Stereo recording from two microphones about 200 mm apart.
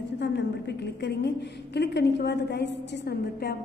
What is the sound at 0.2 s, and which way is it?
A woman's voice, 60° left (ahead or behind).